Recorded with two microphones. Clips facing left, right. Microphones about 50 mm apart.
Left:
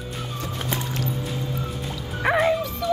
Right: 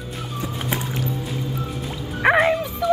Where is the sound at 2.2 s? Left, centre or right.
Right.